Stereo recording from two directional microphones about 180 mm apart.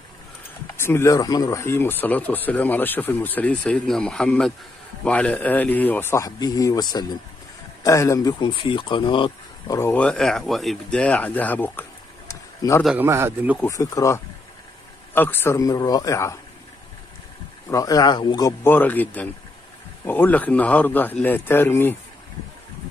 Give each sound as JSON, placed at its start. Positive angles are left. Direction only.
{"t": 0.7, "sound": "speech", "side_deg": 15}
{"t": 9.8, "sound": "speech", "side_deg": 10}
{"t": 12.3, "sound": "a sound", "side_deg": 15}
{"t": 12.8, "sound": "a man's voice", "side_deg": -10}
{"t": 13.6, "sound": "speech", "side_deg": 15}
{"t": 17.6, "sound": "speech", "side_deg": 20}
{"t": 18.6, "sound": "speech", "side_deg": 10}